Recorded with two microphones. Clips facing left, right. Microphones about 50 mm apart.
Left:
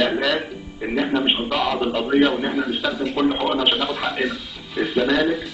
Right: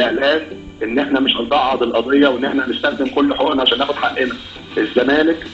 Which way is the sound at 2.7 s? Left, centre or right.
Right.